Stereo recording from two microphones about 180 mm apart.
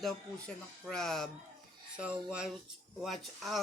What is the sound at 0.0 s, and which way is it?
Speech, 5° left (ahead or behind).